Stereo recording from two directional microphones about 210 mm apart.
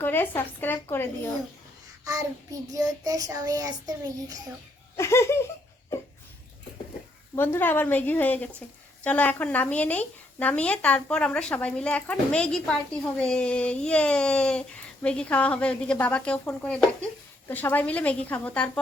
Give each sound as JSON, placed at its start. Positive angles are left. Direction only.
{"t": 0.0, "sound": "speech", "side_deg": 10}
{"t": 2.0, "sound": "child singing", "side_deg": -15}
{"t": 4.9, "sound": "speech", "side_deg": 15}
{"t": 7.3, "sound": "speech", "side_deg": 10}